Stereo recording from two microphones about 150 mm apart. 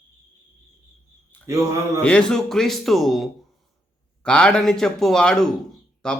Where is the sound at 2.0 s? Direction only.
10° left (ahead or behind).